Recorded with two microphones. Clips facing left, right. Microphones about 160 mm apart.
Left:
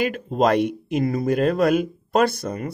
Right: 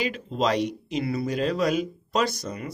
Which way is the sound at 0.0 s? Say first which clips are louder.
Left 6 dB; 50° left (ahead or behind).